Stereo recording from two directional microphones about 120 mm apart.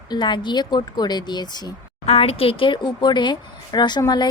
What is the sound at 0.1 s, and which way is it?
Speech, 40° left (ahead or behind).